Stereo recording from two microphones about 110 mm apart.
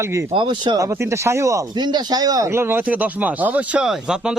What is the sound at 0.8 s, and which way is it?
Speech, 25° right (ahead or behind).